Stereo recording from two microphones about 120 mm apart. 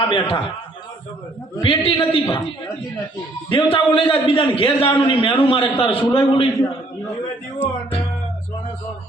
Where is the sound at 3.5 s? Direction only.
45° left (ahead or behind).